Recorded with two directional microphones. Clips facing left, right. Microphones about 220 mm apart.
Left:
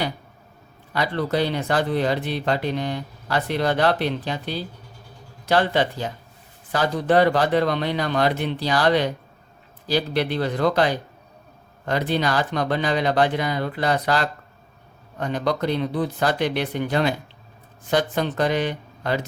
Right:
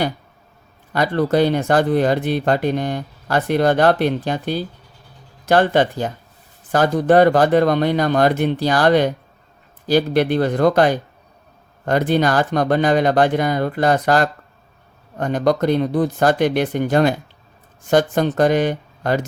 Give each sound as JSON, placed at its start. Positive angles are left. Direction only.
{"t": 0.9, "sound": "speech", "side_deg": -50}